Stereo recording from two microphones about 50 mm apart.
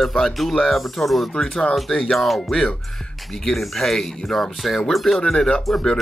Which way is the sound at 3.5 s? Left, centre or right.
Centre.